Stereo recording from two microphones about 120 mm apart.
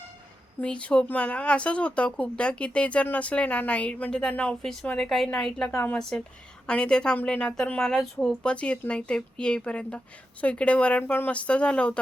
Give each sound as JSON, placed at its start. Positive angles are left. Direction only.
{"t": 0.6, "sound": "speech", "side_deg": 10}
{"t": 5.7, "sound": "speech", "side_deg": 15}
{"t": 6.0, "sound": "speech", "side_deg": 5}